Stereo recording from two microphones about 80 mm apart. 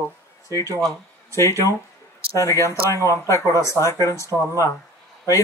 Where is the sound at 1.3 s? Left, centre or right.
Left.